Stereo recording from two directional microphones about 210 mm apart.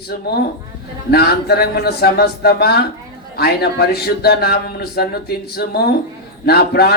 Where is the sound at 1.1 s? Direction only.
50° left (ahead or behind).